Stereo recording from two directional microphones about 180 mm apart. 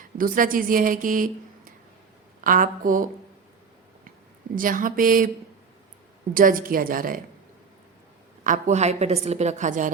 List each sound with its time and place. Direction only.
0.0 s a woman's voice: 50° right (ahead or behind)
2.4 s a woman's voice: 50° right (ahead or behind)
4.5 s a woman's voice: 50° right (ahead or behind)
6.3 s a woman's voice: 50° right (ahead or behind)
8.4 s a woman's voice: 45° right (ahead or behind)